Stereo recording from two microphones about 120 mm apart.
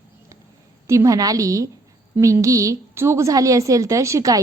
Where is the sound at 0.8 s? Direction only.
25° right (ahead or behind).